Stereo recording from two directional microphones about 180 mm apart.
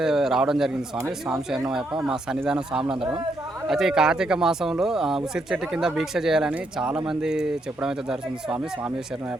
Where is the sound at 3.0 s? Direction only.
30° right (ahead or behind).